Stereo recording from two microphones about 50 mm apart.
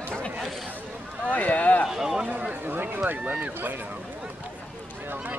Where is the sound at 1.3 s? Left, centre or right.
Left.